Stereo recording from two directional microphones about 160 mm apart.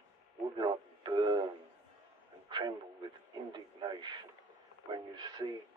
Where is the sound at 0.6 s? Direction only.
25° right (ahead or behind).